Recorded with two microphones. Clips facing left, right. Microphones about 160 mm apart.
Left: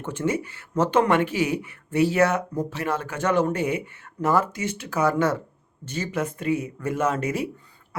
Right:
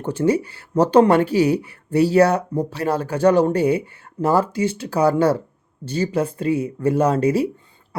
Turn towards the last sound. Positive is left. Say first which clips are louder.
# right 7 dB
turn(degrees=-30)  # may be behind; listen again after turning